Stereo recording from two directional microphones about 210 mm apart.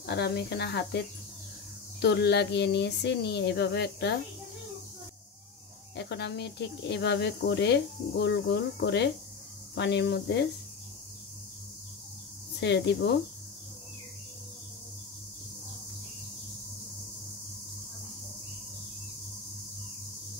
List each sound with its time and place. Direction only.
0.0 s speech: 50° left (ahead or behind)
5.9 s speech: 55° left (ahead or behind)
12.5 s speech: 55° left (ahead or behind)